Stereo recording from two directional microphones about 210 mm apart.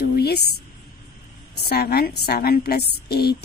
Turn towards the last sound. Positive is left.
turn(degrees=50)  # may be behind; listen again after turning